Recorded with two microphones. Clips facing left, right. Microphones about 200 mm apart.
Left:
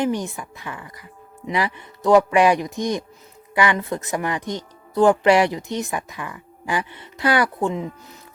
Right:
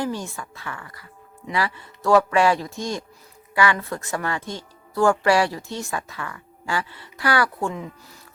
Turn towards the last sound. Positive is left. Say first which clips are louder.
# left 3 dB
turn(degrees=20)  # may be behind; listen again after turning